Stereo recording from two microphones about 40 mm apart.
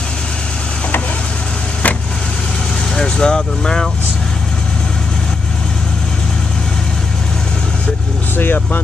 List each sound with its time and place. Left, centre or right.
3.0 s speech: left
8.4 s speech: left